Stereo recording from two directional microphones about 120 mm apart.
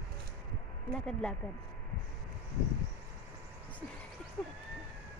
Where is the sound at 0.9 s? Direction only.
10° left (ahead or behind).